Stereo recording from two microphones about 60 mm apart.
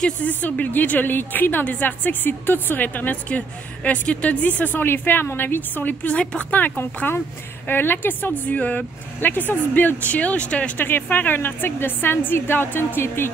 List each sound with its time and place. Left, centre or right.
0.0 s a woman's voice: left
7.6 s speech: left; by 10.7 s centre
10.8 s speech: left